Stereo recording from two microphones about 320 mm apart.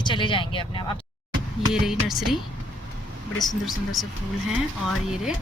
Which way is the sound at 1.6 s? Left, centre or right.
Centre.